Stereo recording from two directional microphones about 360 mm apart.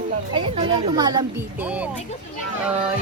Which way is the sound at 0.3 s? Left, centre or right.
Centre.